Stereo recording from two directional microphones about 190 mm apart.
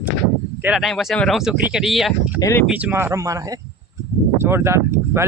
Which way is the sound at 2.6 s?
5° right (ahead or behind).